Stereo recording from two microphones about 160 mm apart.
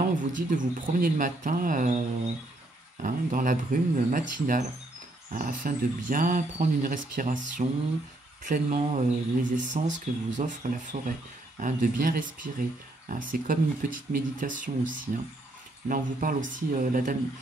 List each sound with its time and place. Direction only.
0.2 s speech: 55° right (ahead or behind)
3.0 s speech: 55° right (ahead or behind)